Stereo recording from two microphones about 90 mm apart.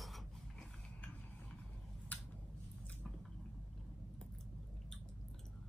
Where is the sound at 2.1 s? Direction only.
15° left (ahead or behind).